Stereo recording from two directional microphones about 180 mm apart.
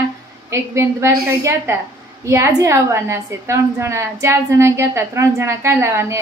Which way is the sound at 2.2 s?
15° right (ahead or behind).